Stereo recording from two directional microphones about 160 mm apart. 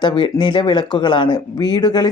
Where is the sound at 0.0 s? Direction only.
30° left (ahead or behind).